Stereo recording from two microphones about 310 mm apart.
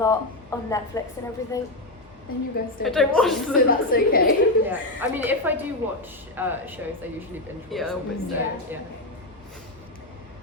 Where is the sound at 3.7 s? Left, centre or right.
Left.